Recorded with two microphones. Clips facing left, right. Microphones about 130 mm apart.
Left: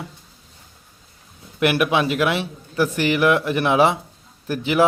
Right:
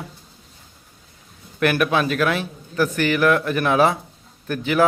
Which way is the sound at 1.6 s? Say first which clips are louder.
Left 1 dB; 20° left (ahead or behind).